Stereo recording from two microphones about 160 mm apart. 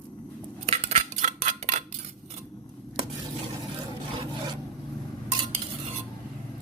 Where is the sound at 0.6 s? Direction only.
40° right (ahead or behind).